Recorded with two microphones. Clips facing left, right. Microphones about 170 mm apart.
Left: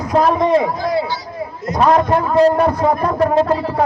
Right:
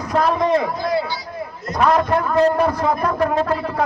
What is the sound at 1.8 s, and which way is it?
A man's voice, 30° left (ahead or behind).